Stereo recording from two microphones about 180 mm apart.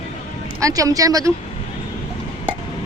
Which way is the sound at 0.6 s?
20° right (ahead or behind).